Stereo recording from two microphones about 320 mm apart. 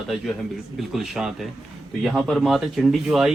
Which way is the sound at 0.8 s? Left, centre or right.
Centre.